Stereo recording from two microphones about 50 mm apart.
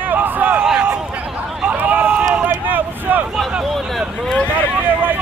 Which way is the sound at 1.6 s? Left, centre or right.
Right.